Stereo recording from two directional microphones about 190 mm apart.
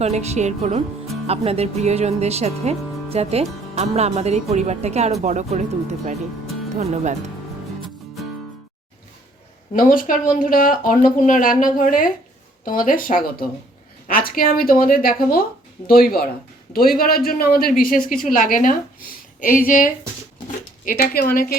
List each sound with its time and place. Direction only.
0.0 s speech: 35° right (ahead or behind)
9.7 s speech: 45° left (ahead or behind)